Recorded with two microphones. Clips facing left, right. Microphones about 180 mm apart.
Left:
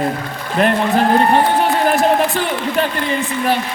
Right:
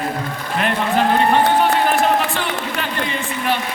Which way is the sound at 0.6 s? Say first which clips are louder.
Left 7 dB; 40° left (ahead or behind).